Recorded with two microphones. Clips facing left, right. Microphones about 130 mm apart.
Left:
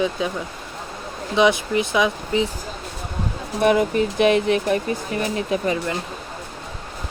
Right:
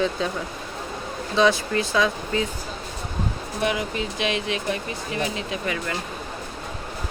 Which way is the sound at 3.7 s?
50° left (ahead or behind).